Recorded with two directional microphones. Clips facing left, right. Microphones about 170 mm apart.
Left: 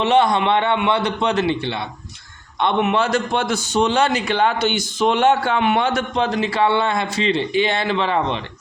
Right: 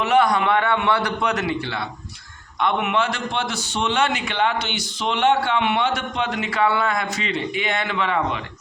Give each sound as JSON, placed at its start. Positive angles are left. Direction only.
{"t": 0.0, "sound": "a man's voice", "side_deg": 25}